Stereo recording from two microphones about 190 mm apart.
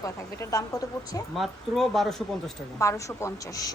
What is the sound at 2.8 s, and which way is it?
Speech, 15° left (ahead or behind).